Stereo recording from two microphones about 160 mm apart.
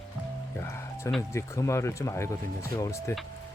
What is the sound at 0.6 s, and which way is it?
Speech, 15° left (ahead or behind).